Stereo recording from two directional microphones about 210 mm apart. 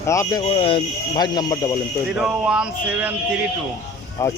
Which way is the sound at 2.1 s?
5° right (ahead or behind).